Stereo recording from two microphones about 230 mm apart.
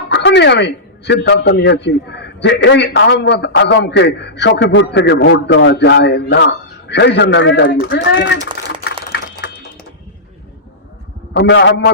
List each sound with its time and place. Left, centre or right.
0.1 s a man's voice: left
11.3 s a man's voice: left